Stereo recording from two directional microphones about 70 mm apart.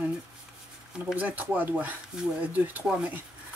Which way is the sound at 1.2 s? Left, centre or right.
Right.